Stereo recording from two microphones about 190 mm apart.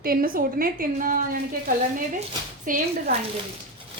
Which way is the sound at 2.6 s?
45° right (ahead or behind).